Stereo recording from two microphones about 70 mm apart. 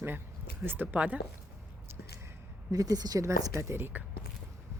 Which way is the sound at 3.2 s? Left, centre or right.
Right.